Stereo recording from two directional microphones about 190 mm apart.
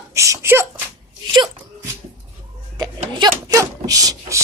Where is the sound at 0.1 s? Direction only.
15° right (ahead or behind).